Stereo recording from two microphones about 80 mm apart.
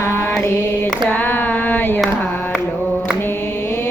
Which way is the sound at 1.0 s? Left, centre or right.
Left.